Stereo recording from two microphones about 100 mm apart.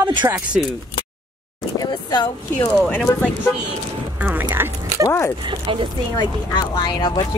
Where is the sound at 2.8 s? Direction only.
10° left (ahead or behind).